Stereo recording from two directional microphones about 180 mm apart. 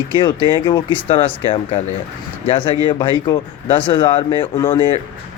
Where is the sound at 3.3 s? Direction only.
25° left (ahead or behind).